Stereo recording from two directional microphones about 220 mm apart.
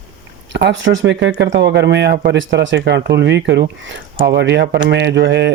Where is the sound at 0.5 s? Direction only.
55° right (ahead or behind).